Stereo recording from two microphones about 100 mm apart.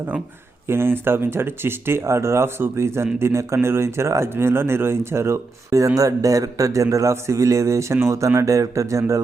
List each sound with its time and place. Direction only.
0.7 s speech: 25° right (ahead or behind)